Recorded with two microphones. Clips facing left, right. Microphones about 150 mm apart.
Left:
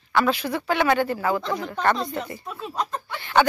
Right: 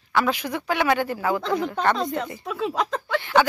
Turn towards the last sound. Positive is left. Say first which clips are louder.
# right 4 dB
turn(degrees=-90)